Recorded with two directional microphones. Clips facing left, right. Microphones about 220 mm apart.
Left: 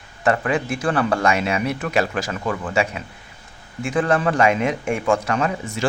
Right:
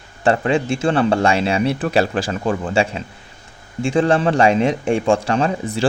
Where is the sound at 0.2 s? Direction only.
30° right (ahead or behind).